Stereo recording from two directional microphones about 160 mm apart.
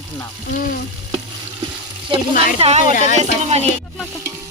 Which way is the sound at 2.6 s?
40° right (ahead or behind).